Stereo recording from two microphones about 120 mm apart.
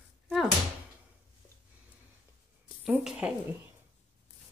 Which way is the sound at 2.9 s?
10° right (ahead or behind).